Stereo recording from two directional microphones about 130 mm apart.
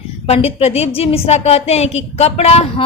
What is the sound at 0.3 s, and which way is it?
A woman's voice, 50° left (ahead or behind).